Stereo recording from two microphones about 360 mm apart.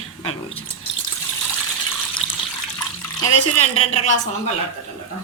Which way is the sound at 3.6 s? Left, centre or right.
Centre.